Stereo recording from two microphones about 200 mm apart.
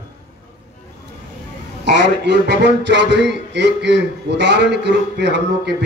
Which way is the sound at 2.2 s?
60° right (ahead or behind).